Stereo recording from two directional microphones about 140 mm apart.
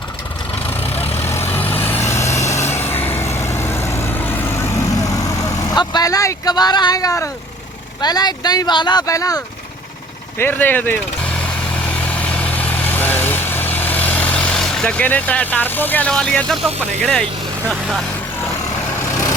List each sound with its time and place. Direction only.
0.9 s vehicle: 45° left (ahead or behind)
1.2 s vehicle: 15° left (ahead or behind)
8.0 s speech: 30° left (ahead or behind)
10.3 s vehicle: 15° left (ahead or behind)
17.0 s speech: 10° left (ahead or behind)